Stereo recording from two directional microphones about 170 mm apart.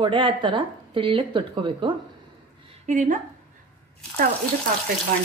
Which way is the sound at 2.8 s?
45° right (ahead or behind).